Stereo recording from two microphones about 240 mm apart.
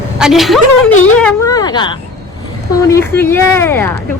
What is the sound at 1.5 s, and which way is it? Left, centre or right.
Vehicle, centre.